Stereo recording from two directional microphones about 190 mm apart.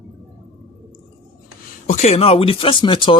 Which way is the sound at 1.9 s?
35° left (ahead or behind).